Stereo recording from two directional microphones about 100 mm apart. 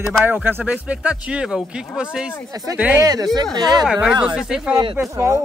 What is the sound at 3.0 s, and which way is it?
Speech, 40° right (ahead or behind).